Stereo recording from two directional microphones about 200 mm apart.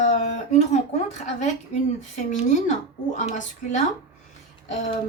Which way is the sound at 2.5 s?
40° left (ahead or behind).